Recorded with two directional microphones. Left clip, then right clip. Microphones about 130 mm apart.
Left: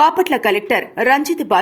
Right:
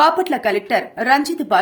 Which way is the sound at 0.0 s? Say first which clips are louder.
Left 2 dB; 30° left (ahead or behind).